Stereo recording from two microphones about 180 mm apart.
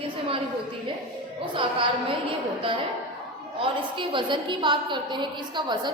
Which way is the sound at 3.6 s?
25° right (ahead or behind).